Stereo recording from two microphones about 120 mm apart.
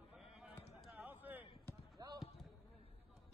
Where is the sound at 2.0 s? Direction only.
35° right (ahead or behind).